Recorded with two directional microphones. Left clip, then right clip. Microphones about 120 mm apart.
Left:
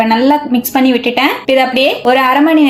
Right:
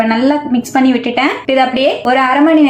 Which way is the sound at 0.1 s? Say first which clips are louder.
Left 3 dB; 20° left (ahead or behind).